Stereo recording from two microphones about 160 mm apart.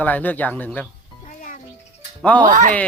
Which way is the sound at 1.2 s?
55° left (ahead or behind).